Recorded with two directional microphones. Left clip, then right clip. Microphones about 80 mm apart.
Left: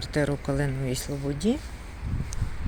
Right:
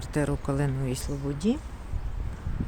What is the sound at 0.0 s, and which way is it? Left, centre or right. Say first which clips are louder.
Speech: left 2 dB; right.